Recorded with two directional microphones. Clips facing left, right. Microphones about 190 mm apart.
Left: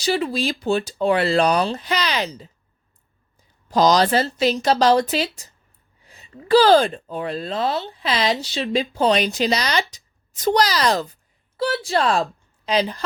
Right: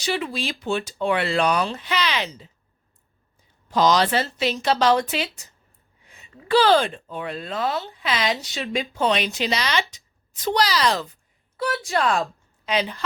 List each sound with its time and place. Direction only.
0.0 s speech: 35° left (ahead or behind)
3.7 s speech: 40° left (ahead or behind)